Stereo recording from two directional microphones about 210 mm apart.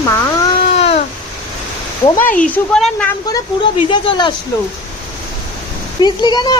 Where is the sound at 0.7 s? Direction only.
30° left (ahead or behind).